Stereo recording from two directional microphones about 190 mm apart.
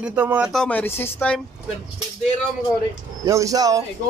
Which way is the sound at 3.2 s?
15° right (ahead or behind).